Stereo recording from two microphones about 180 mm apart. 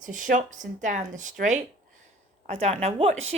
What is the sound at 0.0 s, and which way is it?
A woman's voice, 45° right (ahead or behind).